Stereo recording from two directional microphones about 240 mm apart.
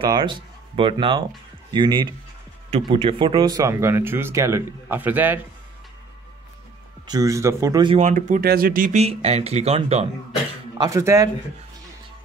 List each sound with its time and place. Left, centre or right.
0.1 s speech: centre
7.1 s speech: centre
8.0 s speech: right
10.8 s speech: centre